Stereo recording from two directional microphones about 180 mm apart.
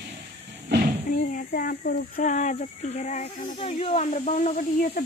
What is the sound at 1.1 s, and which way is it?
Speech, 50° left (ahead or behind).